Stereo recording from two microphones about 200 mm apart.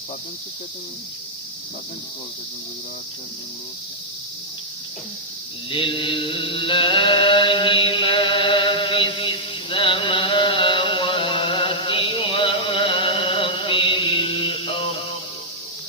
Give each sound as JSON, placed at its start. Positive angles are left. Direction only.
{"t": 5.7, "sound": "mantra", "side_deg": 25}